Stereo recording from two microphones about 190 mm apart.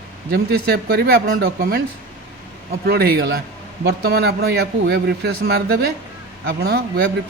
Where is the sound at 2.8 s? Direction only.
55° right (ahead or behind).